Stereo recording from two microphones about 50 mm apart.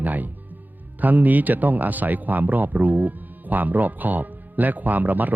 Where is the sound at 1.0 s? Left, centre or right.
Right.